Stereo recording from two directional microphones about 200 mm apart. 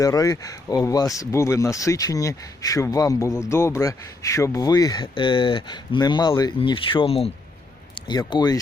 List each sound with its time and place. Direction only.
0.0 s speech: 15° left (ahead or behind)